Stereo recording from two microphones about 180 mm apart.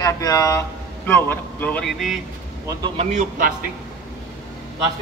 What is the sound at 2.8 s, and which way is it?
Speech, 35° right (ahead or behind).